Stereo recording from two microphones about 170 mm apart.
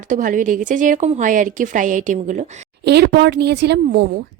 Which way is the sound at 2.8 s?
75° right (ahead or behind).